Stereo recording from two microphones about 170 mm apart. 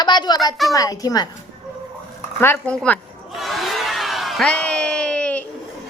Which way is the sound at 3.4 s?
Centre (ahead or behind).